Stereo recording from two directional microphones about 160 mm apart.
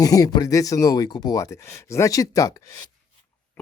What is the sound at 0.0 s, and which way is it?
Speech, 20° left (ahead or behind).